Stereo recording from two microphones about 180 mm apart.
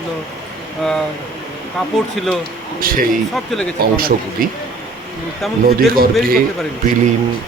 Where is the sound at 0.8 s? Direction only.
Centre (ahead or behind).